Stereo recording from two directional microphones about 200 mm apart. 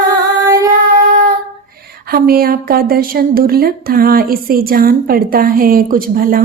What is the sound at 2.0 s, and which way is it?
A woman's voice, 45° right (ahead or behind).